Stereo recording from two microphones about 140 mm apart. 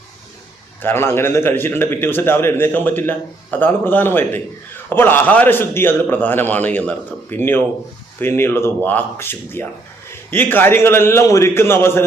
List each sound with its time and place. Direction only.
0.8 s a man's voice: 15° left (ahead or behind)